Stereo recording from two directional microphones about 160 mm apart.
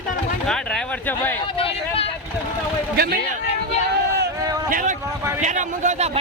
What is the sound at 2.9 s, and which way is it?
Speech, 75° right (ahead or behind).